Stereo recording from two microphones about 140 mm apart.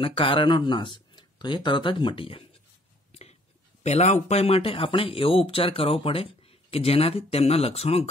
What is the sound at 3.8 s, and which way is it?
Speech, 55° left (ahead or behind).